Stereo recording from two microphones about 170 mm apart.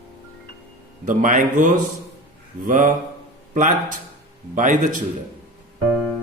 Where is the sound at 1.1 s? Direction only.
50° right (ahead or behind).